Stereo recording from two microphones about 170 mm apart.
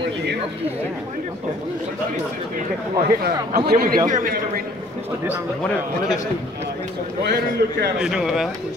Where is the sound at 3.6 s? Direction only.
60° right (ahead or behind).